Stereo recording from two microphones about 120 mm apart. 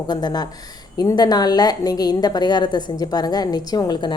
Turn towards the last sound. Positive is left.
turn(degrees=35)  # may be behind; listen again after turning